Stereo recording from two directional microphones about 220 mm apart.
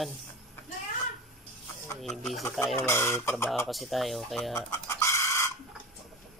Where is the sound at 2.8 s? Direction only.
10° left (ahead or behind).